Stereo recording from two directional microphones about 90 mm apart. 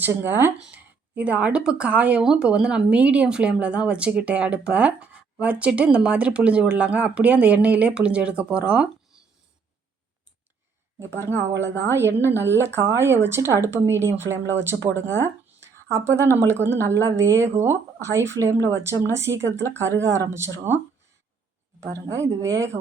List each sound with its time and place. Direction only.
0.1 s speech: 25° right (ahead or behind)
11.9 s speech: 25° right (ahead or behind)
15.6 s a sound: 30° right (ahead or behind)
16.4 s speech: 30° right (ahead or behind)
21.9 s speech: 40° right (ahead or behind)